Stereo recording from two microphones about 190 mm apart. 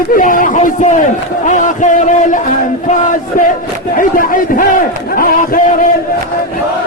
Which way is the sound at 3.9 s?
45° left (ahead or behind).